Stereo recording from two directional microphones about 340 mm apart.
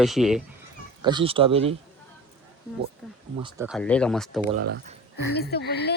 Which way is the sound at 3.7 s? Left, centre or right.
Centre.